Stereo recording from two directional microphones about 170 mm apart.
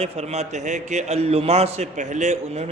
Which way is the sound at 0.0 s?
40° right (ahead or behind).